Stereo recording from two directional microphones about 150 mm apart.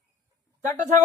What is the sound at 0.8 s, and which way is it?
Speech, 55° right (ahead or behind).